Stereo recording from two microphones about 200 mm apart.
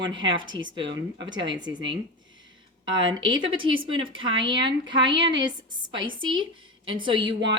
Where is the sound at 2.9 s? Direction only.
25° right (ahead or behind).